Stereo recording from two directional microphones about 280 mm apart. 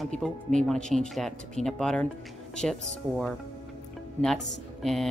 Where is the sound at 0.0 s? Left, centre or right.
Centre.